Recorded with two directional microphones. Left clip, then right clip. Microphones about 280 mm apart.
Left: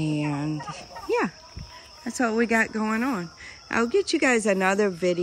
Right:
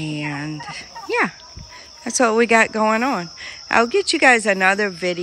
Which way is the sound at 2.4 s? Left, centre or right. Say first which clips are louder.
Right 8 dB; left.